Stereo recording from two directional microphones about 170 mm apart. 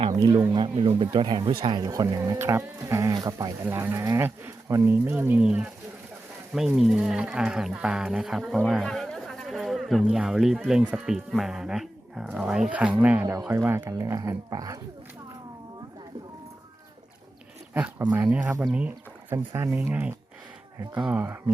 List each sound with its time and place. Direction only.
0.1 s speech: 20° right (ahead or behind)
18.1 s speech: 10° right (ahead or behind)